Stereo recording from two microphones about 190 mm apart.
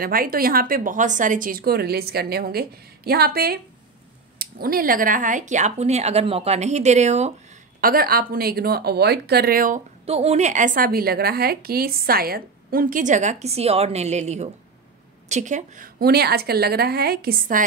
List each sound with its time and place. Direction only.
0.0 s a woman's voice: 50° right (ahead or behind)
7.8 s speech: 50° right (ahead or behind)
10.0 s a woman's voice: 35° right (ahead or behind); by 17.6 s 50° right (ahead or behind)